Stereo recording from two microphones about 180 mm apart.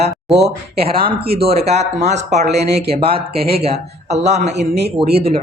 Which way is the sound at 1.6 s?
35° right (ahead or behind).